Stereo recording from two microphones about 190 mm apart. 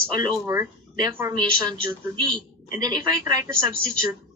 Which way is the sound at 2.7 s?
20° right (ahead or behind).